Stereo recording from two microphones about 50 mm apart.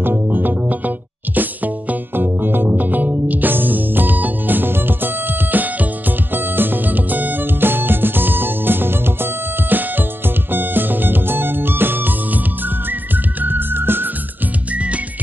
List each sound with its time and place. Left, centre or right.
0.0 s music: right
14.7 s music: right